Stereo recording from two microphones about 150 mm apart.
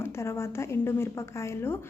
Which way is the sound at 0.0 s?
15° left (ahead or behind).